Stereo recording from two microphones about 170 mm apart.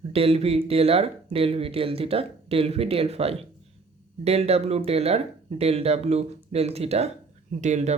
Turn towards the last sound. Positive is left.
turn(degrees=-40)  # may be behind; listen again after turning